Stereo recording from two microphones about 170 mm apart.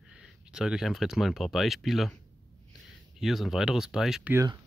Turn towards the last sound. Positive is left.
turn(degrees=-20)  # may be behind; listen again after turning